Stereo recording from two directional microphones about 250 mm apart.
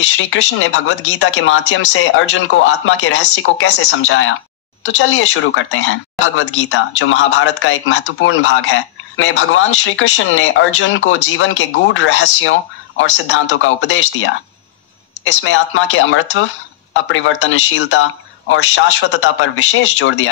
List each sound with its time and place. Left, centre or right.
0.2 s speech: left
15.4 s speech: left